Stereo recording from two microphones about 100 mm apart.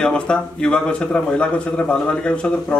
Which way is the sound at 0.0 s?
10° left (ahead or behind).